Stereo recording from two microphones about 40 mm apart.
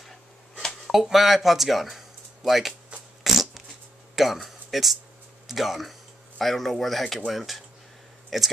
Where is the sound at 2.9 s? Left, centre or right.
Right.